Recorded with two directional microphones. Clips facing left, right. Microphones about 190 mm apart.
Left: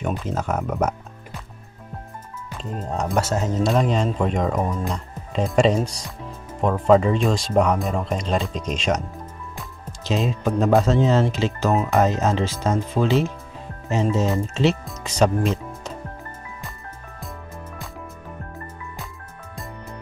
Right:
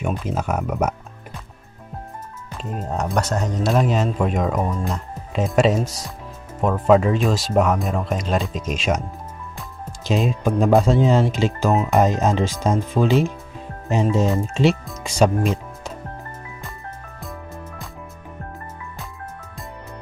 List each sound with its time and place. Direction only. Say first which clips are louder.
0.1 s speech: right 1 dB; 10° right (ahead or behind)
2.7 s speech: even; 10° right (ahead or behind)
10.0 s speech: right 2 dB; 15° right (ahead or behind)